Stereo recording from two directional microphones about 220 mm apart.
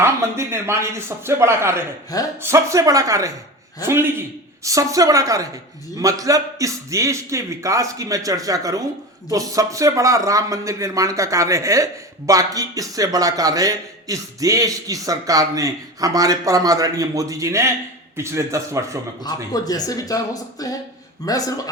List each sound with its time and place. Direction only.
0.0 s speech: 10° right (ahead or behind)
4.6 s speech: 15° right (ahead or behind)
19.2 s speech: 15° left (ahead or behind)